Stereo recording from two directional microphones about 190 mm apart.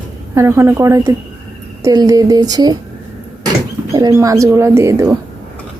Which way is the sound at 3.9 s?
15° right (ahead or behind).